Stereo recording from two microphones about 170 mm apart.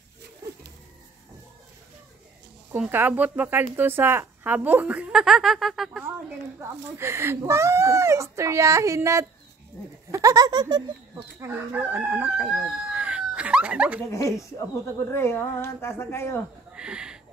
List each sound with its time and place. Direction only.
2.7 s speech: 10° right (ahead or behind)
6.6 s speech: 15° right (ahead or behind)
11.4 s chicken: 10° right (ahead or behind)
15.0 s a woman's voice: 15° left (ahead or behind)
16.7 s a sound: 5° right (ahead or behind)